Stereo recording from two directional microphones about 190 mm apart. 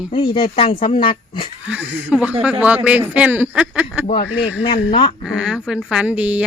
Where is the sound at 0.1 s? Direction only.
25° left (ahead or behind).